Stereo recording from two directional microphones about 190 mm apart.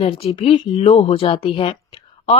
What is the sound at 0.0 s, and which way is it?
Speech, 30° left (ahead or behind).